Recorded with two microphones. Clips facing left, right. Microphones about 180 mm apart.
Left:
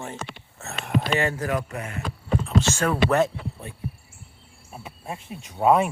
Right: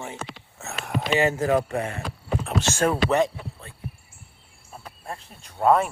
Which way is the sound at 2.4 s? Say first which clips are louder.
Left 3 dB; 65° right (ahead or behind).